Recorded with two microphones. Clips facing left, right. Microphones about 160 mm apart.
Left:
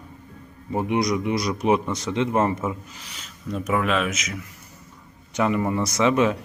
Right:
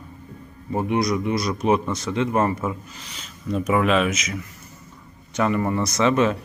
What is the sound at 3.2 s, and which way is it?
Speech, centre (ahead or behind).